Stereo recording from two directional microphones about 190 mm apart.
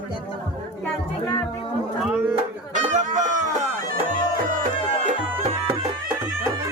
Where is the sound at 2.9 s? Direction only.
40° right (ahead or behind).